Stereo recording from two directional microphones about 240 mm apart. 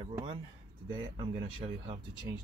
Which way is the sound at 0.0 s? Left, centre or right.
Right.